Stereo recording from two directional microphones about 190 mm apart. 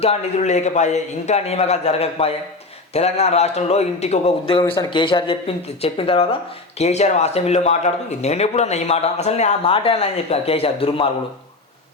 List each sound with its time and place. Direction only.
0.0 s speech: 35° left (ahead or behind)